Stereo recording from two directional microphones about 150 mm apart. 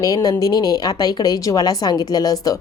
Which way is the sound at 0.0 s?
25° left (ahead or behind).